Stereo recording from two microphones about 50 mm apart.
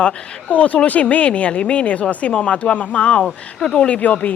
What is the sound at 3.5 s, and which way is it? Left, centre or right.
Speech, centre.